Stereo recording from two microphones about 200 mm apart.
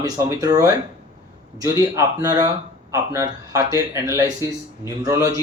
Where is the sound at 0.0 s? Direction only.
15° right (ahead or behind).